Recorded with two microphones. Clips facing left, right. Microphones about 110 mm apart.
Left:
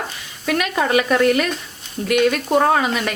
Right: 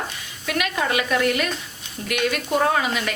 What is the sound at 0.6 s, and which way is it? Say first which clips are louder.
Speech: left 4 dB; 40° left (ahead or behind).